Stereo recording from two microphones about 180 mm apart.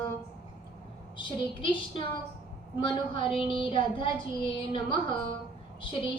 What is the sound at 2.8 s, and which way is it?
A woman's voice, 30° left (ahead or behind).